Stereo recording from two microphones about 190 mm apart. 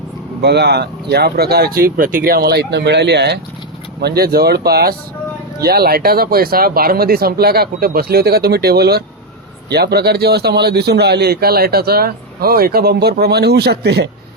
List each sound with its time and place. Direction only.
0.4 s a man's voice: 60° right (ahead or behind)